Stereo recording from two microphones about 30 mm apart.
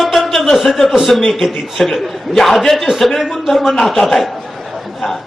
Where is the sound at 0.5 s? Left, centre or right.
Centre.